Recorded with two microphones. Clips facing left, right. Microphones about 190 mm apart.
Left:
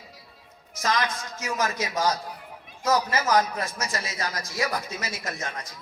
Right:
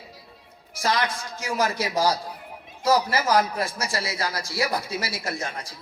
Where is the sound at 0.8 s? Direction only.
30° right (ahead or behind).